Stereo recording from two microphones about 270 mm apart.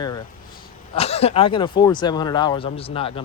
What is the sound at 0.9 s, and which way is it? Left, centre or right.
Speech, left.